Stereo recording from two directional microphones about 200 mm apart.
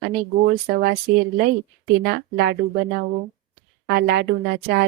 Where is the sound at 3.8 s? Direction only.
55° right (ahead or behind).